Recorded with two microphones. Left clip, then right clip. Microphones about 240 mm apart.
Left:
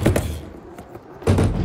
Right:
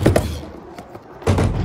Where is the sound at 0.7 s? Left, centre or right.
Right.